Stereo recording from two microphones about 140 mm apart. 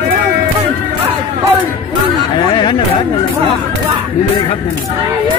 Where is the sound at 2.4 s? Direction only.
35° left (ahead or behind).